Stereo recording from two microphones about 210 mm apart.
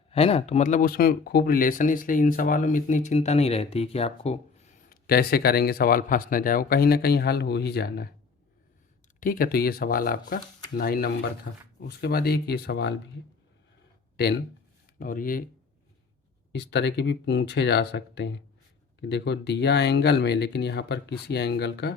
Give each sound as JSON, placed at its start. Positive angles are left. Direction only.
{"t": 0.1, "sound": "speech", "side_deg": 30}
{"t": 4.9, "sound": "speech", "side_deg": 45}
{"t": 9.2, "sound": "speech", "side_deg": 40}
{"t": 14.9, "sound": "speech", "side_deg": 40}
{"t": 16.5, "sound": "speech", "side_deg": 55}